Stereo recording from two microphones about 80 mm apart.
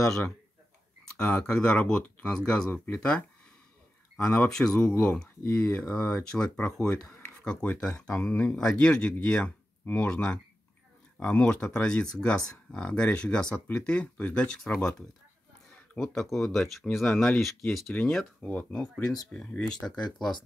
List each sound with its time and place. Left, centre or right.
1.1 s speech: centre
4.3 s speech: centre
20.1 s speech: centre